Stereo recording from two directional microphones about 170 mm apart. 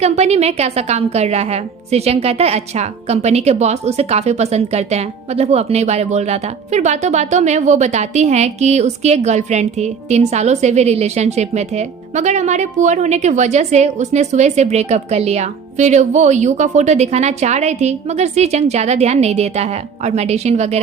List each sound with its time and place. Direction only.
0.0 s a woman's voice: 40° right (ahead or behind)